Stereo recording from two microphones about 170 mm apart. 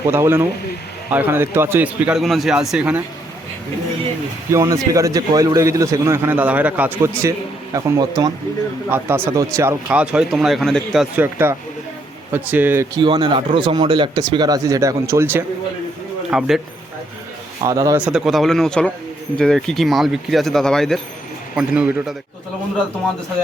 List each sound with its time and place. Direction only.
0.0 s a man's voice: 15° right (ahead or behind)
4.5 s a man's voice: 20° right (ahead or behind)
13.0 s speech: 30° right (ahead or behind)
16.3 s speech: 5° right (ahead or behind)
17.6 s speech: 20° right (ahead or behind)
18.0 s a man's voice: centre (ahead or behind)